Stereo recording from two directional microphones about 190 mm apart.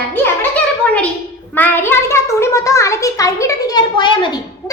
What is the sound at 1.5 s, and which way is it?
A child's voice, 10° left (ahead or behind).